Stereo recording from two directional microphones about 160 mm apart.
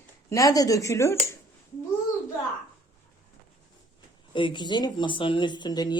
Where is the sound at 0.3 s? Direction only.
20° left (ahead or behind).